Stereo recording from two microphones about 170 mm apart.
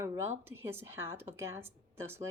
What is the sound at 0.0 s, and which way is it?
Speech, 15° right (ahead or behind).